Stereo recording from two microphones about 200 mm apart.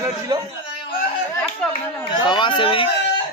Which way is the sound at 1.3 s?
10° left (ahead or behind).